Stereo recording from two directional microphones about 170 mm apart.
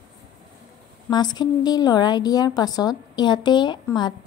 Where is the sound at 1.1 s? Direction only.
25° left (ahead or behind).